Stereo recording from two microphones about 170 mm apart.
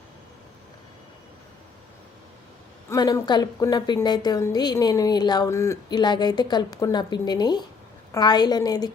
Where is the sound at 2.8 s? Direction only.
20° left (ahead or behind).